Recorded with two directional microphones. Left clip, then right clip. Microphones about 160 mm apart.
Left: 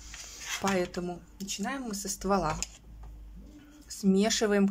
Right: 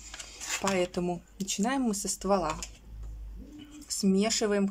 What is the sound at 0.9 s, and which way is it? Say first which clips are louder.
Speech: right 4 dB; 20° right (ahead or behind).